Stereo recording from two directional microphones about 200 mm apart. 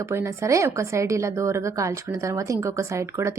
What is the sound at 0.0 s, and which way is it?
A woman's voice, 15° right (ahead or behind).